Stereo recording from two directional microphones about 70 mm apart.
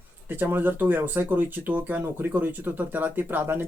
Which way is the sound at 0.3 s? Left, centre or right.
Right.